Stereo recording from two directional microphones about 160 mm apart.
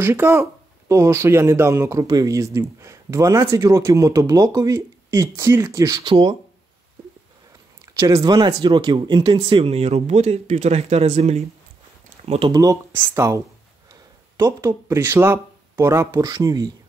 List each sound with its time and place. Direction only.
0.0 s speech: 15° right (ahead or behind); by 6.3 s 30° right (ahead or behind)
7.8 s speech: 20° right (ahead or behind)
12.5 s speech: 15° right (ahead or behind)